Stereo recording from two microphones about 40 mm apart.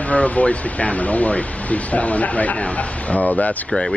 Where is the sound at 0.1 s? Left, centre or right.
Left.